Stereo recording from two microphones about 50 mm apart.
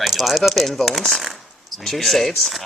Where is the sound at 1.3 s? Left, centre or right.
Centre.